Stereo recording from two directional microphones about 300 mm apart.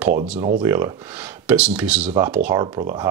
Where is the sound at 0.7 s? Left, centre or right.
Centre.